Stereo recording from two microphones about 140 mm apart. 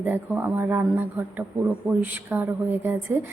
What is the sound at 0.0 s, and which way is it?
A woman's voice, 15° right (ahead or behind).